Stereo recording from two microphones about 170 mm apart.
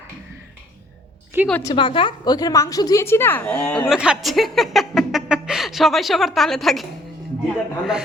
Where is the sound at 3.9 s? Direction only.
5° right (ahead or behind).